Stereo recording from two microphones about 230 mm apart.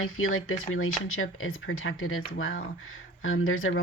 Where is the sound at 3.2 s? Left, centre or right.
Left.